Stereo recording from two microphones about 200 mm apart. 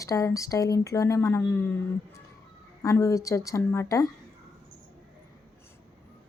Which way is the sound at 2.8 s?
15° left (ahead or behind).